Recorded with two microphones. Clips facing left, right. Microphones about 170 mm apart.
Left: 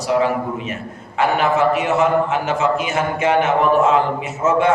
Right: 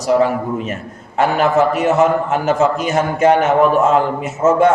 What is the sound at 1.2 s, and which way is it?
A man's voice, 40° right (ahead or behind).